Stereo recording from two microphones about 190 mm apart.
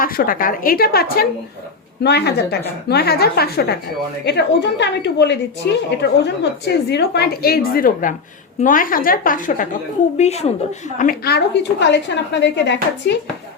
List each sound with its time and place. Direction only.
0.0 s a woman's voice: 50° left (ahead or behind)
10.9 s a woman's voice: 45° left (ahead or behind); by 13.1 s 65° left (ahead or behind)